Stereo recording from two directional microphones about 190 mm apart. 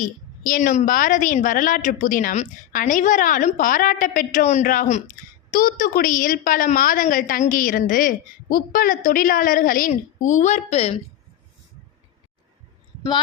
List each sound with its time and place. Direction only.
0.0 s a woman's voice: 45° left (ahead or behind)
13.0 s a woman's voice: 25° left (ahead or behind)